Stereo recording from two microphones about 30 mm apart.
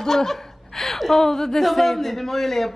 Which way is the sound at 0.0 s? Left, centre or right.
Centre.